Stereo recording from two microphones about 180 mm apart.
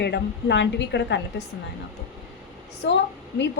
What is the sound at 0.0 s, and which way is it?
A woman's voice, 70° left (ahead or behind).